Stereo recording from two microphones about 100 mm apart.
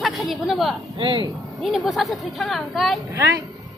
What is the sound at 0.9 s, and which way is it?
Speech, 60° right (ahead or behind).